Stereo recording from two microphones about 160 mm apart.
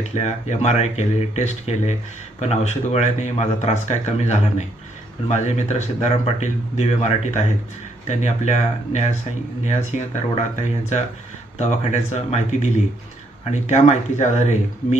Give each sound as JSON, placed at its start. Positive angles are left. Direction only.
{"t": 0.2, "sound": "speech", "side_deg": 45}
{"t": 10.3, "sound": "speech", "side_deg": 45}